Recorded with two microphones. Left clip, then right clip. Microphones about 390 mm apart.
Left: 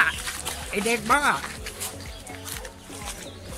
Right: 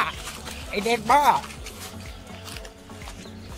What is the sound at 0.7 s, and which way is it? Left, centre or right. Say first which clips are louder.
Speech: right 3 dB; centre.